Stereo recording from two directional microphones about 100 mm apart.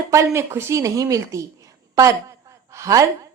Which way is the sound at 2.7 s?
30° right (ahead or behind).